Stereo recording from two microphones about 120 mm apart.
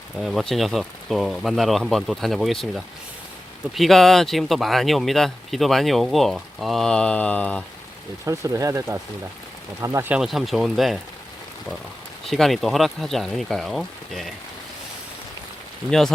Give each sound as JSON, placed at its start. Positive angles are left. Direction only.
{"t": 0.2, "sound": "speech", "side_deg": 0}
{"t": 8.2, "sound": "speech", "side_deg": -25}
{"t": 10.1, "sound": "speech", "side_deg": -5}
{"t": 12.2, "sound": "speech", "side_deg": 0}
{"t": 15.9, "sound": "speech", "side_deg": 5}